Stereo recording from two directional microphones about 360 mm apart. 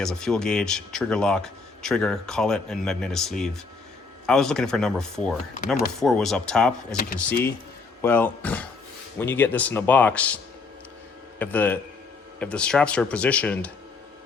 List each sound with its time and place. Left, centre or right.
0.0 s speech: centre
6.9 s speech: left
8.0 s a man's voice: centre